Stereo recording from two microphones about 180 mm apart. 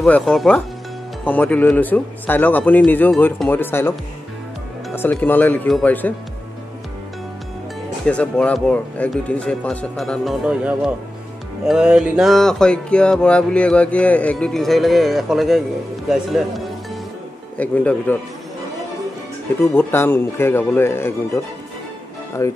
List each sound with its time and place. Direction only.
0.0 s music: 5° left (ahead or behind)
1.2 s speech: 10° left (ahead or behind)
4.9 s speech: 10° left (ahead or behind)
8.0 s music: 5° left (ahead or behind)
16.1 s speech: centre (ahead or behind)
19.6 s speech: 10° left (ahead or behind)
22.4 s speech: 15° left (ahead or behind)